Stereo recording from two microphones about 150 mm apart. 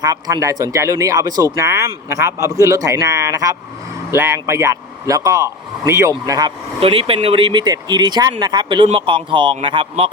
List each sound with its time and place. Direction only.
0.0 s speech: 25° right (ahead or behind)
6.7 s speech: 40° right (ahead or behind)